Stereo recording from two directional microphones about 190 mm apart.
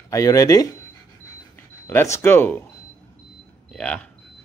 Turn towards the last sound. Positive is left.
turn(degrees=5)  # may be behind; listen again after turning